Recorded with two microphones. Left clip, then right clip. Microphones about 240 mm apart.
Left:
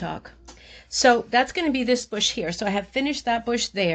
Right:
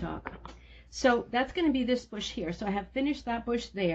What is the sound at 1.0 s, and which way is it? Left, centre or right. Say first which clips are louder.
Speech: left 8 dB; left.